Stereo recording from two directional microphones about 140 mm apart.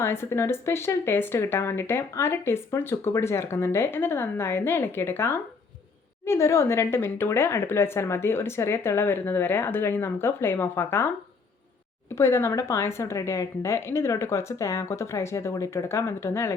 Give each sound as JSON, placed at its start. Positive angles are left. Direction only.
{"t": 0.0, "sound": "speech", "side_deg": 15}
{"t": 12.1, "sound": "a woman's voice", "side_deg": 20}